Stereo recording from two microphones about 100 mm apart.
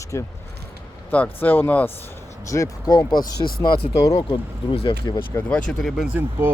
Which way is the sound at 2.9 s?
45° left (ahead or behind).